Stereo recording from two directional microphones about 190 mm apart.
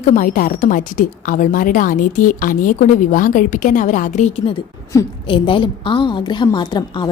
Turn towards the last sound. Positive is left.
turn(degrees=20)  # may be behind; listen again after turning